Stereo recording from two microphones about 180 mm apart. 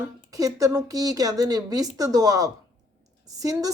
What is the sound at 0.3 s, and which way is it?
A woman's voice, 20° right (ahead or behind).